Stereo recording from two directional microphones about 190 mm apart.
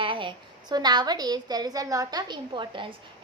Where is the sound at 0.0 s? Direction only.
25° right (ahead or behind).